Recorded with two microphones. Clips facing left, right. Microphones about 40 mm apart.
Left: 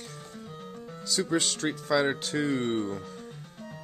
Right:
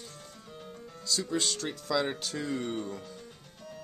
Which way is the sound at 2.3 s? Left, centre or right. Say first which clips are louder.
Left 7 dB; left.